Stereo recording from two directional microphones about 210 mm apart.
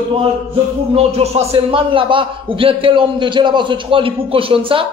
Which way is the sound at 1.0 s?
30° right (ahead or behind).